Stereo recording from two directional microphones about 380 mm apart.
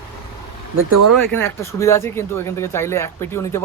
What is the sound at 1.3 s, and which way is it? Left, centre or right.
Speech, centre.